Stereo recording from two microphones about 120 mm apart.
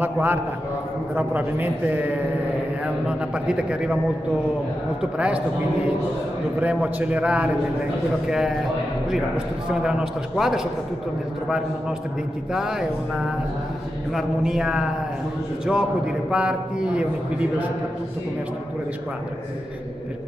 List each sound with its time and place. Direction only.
0.0 s a man's voice: 15° right (ahead or behind)
3.1 s a man's voice: 10° right (ahead or behind)
5.1 s a man's voice: 10° right (ahead or behind)
6.6 s a man's voice: 10° right (ahead or behind)
9.7 s a man's voice: 5° right (ahead or behind)
12.5 s a man's voice: 5° right (ahead or behind)
14.1 s a man's voice: 5° right (ahead or behind)